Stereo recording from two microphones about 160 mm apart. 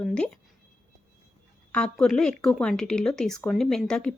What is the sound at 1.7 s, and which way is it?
Speech, 5° left (ahead or behind).